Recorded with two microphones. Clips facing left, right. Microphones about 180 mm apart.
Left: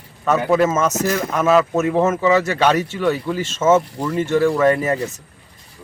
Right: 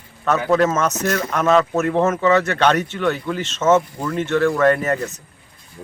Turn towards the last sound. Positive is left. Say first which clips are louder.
# even
turn(degrees=10)  # may be behind; listen again after turning